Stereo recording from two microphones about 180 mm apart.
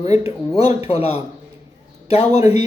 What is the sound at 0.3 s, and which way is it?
Speech, 40° left (ahead or behind).